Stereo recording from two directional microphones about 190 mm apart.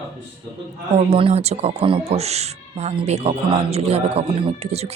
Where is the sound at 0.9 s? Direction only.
30° right (ahead or behind).